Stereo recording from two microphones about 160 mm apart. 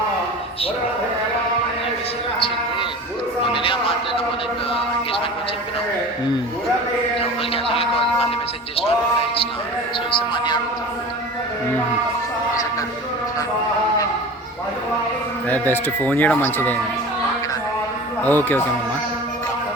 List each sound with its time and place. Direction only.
3.5 s music: 35° left (ahead or behind)
7.2 s a sound: 35° left (ahead or behind)
10.3 s a man's voice: 30° left (ahead or behind)
15.4 s speech: 10° left (ahead or behind)
18.2 s a man's voice: 10° left (ahead or behind)